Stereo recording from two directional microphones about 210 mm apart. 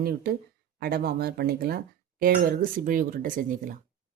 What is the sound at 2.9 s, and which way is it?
Speech, 40° right (ahead or behind).